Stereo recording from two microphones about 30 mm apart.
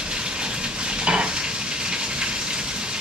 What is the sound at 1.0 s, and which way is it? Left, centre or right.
Stir, right.